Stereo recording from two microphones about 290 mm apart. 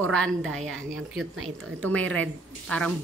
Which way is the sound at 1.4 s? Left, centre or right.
Right.